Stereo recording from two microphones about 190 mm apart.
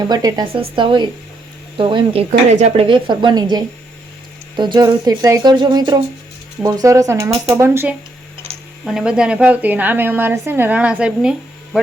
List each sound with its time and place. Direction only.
0.1 s a woman's voice: 20° right (ahead or behind)
8.8 s a woman's voice: centre (ahead or behind)